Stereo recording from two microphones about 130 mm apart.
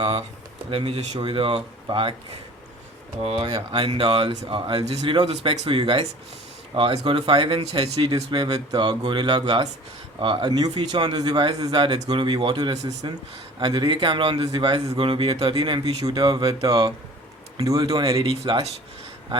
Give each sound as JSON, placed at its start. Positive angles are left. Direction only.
{"t": 0.7, "sound": "speech", "side_deg": -50}
{"t": 3.4, "sound": "speech", "side_deg": -40}
{"t": 5.1, "sound": "speech", "side_deg": -30}
{"t": 8.1, "sound": "speech", "side_deg": -30}
{"t": 16.2, "sound": "speech", "side_deg": -45}
{"t": 17.6, "sound": "speech", "side_deg": -25}
{"t": 18.4, "sound": "speech", "side_deg": -45}